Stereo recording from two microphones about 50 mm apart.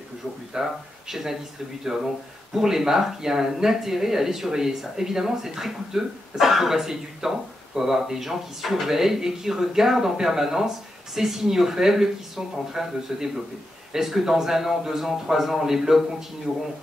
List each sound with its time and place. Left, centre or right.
0.5 s speech: centre
2.5 s speech: centre
16.5 s speech: centre